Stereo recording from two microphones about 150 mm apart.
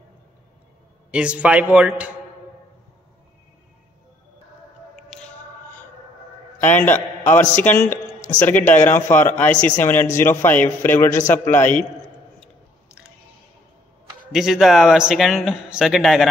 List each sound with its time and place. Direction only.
1.1 s a man's voice: 5° right (ahead or behind)
5.1 s music: centre (ahead or behind)
6.6 s a man's voice: 15° left (ahead or behind)
11.1 s a man's voice: 60° left (ahead or behind)
11.3 s a man's voice: 15° left (ahead or behind)
14.3 s speech: centre (ahead or behind)